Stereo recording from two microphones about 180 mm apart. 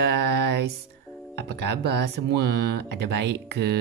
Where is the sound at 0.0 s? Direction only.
65° right (ahead or behind).